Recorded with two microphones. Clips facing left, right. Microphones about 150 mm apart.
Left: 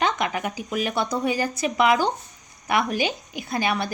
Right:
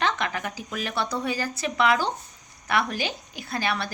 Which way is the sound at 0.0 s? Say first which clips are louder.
Left 3 dB; 15° left (ahead or behind).